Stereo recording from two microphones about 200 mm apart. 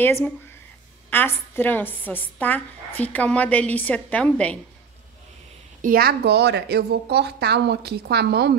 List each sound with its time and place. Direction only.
0.0 s a woman's voice: 10° left (ahead or behind)
5.8 s a woman's voice: 45° right (ahead or behind)